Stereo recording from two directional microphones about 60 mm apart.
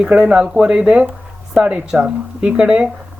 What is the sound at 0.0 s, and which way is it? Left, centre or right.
Speech, centre.